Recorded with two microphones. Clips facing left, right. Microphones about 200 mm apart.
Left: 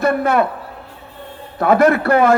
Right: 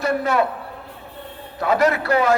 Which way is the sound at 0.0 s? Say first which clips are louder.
Left 4 dB; 55° left (ahead or behind).